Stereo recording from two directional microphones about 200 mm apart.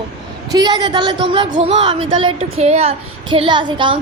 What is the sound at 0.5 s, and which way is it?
A woman's voice, 20° right (ahead or behind).